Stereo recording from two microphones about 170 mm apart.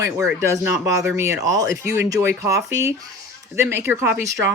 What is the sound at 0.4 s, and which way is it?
Speech, 15° right (ahead or behind).